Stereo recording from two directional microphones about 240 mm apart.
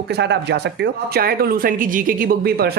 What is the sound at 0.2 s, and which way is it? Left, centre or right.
Speech, right.